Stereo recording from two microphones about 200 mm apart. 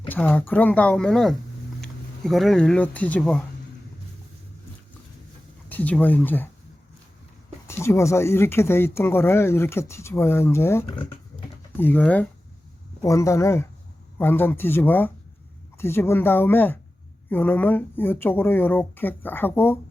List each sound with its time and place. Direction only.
0.1 s speech: 10° left (ahead or behind)
5.6 s speech: 10° left (ahead or behind)
7.7 s speech: 15° left (ahead or behind)